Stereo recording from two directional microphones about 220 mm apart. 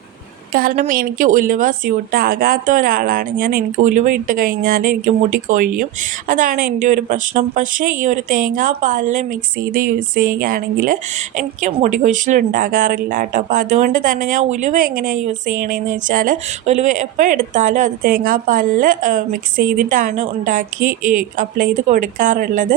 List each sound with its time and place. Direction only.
0.5 s speech: 40° right (ahead or behind)